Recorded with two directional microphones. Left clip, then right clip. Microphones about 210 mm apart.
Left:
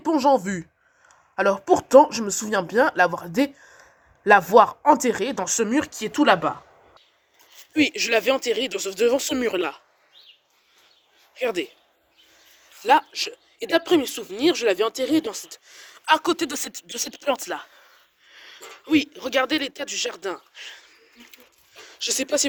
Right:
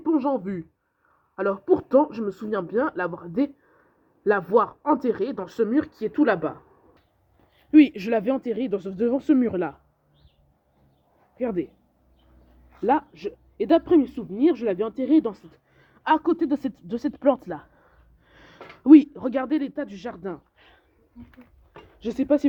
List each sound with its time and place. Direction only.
0.1 s speech: 10° left (ahead or behind)
1.7 s speech: 10° left (ahead or behind)
11.3 s speech: 10° left (ahead or behind)
12.8 s speech: 10° left (ahead or behind)
18.3 s a sound: 20° right (ahead or behind)
18.9 s speech: 10° right (ahead or behind)
19.2 s speech: centre (ahead or behind)
22.1 s speech: 5° left (ahead or behind)